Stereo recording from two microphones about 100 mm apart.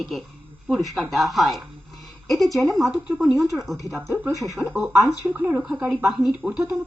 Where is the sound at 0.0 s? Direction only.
Centre (ahead or behind).